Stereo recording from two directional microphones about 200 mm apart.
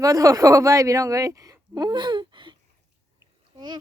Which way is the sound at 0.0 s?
15° right (ahead or behind).